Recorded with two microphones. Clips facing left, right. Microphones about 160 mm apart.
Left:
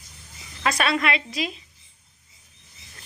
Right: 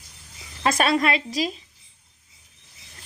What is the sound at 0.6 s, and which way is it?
Speech, 40° right (ahead or behind).